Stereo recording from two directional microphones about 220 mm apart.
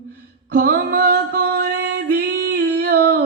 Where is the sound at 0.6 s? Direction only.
45° right (ahead or behind).